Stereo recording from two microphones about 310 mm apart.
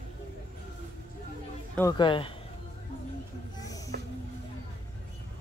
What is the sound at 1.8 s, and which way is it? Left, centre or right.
Speech, centre.